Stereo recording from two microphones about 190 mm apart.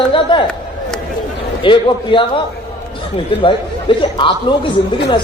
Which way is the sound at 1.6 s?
25° left (ahead or behind).